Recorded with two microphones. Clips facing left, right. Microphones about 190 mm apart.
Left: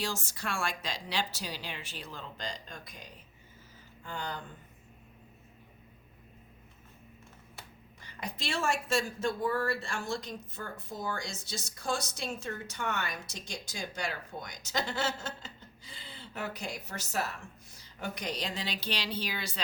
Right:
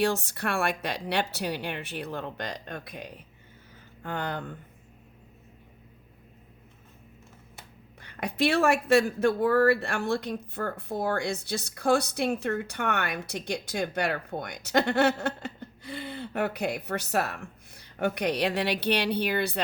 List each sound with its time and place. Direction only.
0.0 s speech: 60° right (ahead or behind)
8.0 s speech: 60° right (ahead or behind)